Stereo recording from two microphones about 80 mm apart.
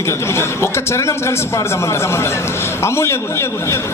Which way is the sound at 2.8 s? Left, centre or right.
Left.